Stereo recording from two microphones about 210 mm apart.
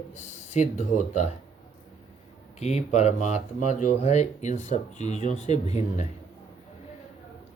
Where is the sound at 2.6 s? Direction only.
30° left (ahead or behind).